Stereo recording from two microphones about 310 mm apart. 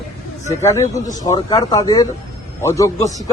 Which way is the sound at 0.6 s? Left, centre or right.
Centre.